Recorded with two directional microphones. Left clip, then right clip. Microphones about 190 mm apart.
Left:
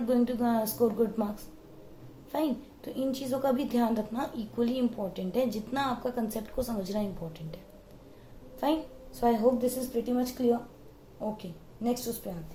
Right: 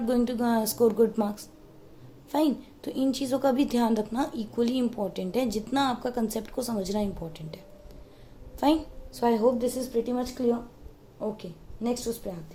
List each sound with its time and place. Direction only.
0.1 s a woman's voice: 55° right (ahead or behind)
2.3 s a woman's voice: 55° right (ahead or behind)
8.6 s a woman's voice: 55° right (ahead or behind)
11.8 s a woman's voice: 45° right (ahead or behind)